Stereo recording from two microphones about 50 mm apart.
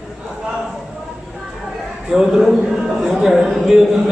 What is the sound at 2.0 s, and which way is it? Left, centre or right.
Speech, centre.